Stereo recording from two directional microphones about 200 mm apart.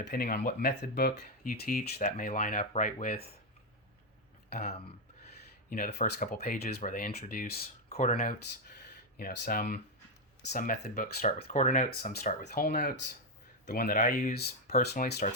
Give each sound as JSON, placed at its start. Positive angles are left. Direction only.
{"t": 0.0, "sound": "speech", "side_deg": 50}
{"t": 4.4, "sound": "a sound", "side_deg": 50}
{"t": 5.7, "sound": "speech", "side_deg": 45}
{"t": 7.9, "sound": "speech", "side_deg": 30}